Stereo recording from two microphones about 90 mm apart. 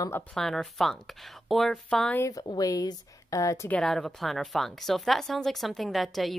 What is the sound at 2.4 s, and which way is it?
Speech, 45° left (ahead or behind).